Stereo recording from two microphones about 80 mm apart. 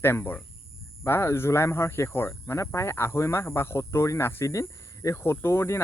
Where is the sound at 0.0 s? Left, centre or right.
Left.